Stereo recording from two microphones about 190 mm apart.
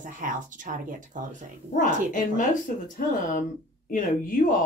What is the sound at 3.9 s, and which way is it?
Speech, 45° left (ahead or behind).